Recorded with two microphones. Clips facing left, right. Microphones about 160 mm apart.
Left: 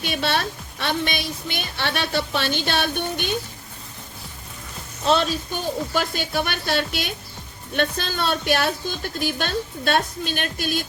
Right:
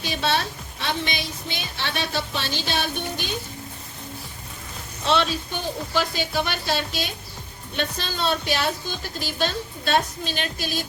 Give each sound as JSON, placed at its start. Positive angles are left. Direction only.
{"t": 0.0, "sound": "a woman's voice", "side_deg": 60}
{"t": 5.0, "sound": "a woman's voice", "side_deg": 40}